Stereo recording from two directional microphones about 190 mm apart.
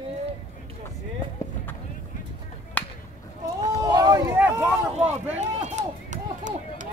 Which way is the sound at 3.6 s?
20° right (ahead or behind).